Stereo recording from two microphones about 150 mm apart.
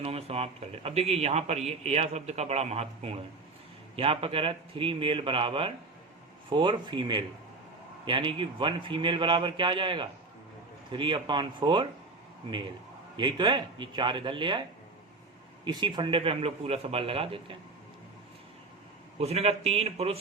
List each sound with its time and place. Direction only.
0.0 s a man's voice: 40° right (ahead or behind)
15.6 s a man's voice: 30° right (ahead or behind)
19.2 s speech: 45° right (ahead or behind)